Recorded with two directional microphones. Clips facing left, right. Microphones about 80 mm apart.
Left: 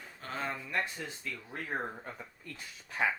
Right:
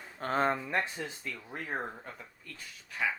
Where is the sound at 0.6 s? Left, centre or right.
Right.